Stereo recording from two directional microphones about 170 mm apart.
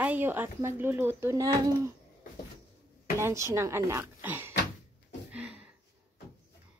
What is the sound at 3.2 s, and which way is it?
A woman's voice, 15° right (ahead or behind).